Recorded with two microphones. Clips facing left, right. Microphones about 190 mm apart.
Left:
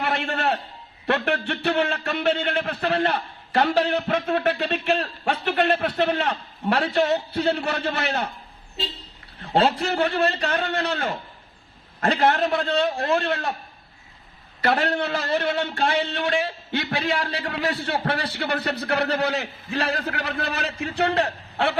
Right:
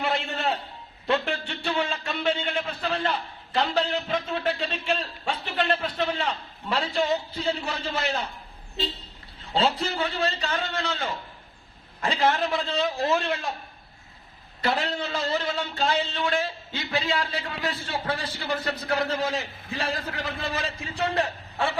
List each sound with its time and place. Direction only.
0.0 s a sound: 60° left (ahead or behind)
1.0 s a man's voice: 65° left (ahead or behind)
9.4 s a man's voice: 65° left (ahead or behind)
14.6 s a man's voice: 65° left (ahead or behind)